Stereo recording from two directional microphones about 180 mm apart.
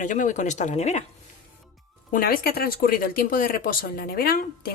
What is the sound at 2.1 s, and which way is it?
Speech, 55° left (ahead or behind).